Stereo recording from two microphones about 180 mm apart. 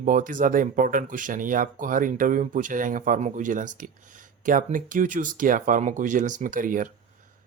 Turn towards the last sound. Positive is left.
turn(degrees=-50)  # may be behind; listen again after turning